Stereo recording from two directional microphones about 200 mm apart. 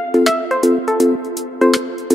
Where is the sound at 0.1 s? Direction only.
Centre (ahead or behind).